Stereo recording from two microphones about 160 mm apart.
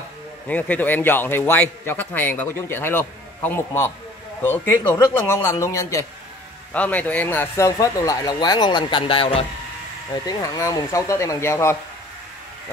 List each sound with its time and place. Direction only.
0.5 s a man's voice: 10° left (ahead or behind); by 9.5 s 35° left (ahead or behind)
10.2 s speech: 20° left (ahead or behind)